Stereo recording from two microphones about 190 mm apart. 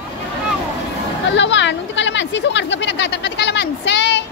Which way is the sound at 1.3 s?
70° left (ahead or behind).